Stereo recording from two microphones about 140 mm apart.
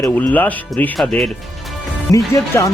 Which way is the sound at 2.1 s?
25° left (ahead or behind).